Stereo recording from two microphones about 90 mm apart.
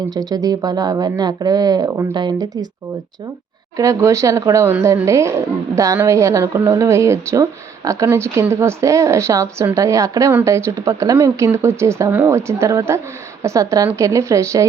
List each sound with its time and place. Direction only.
0.1 s speech: 45° right (ahead or behind)
3.8 s speech: 35° right (ahead or behind)